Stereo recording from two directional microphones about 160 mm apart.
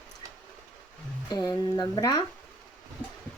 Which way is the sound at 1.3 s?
25° left (ahead or behind).